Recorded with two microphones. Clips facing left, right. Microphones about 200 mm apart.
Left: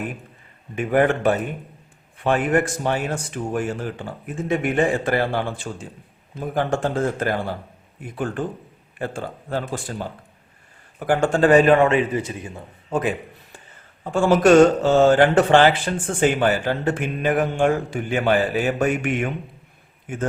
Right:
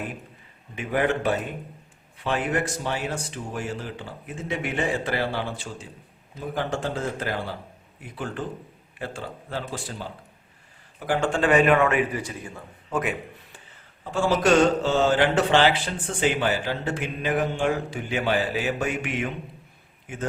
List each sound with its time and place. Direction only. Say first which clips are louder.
0.8 s a man's voice: left 6 dB; 50° left (ahead or behind); by 13.1 s 30° left (ahead or behind)
14.0 s speech: left 6 dB; 50° left (ahead or behind)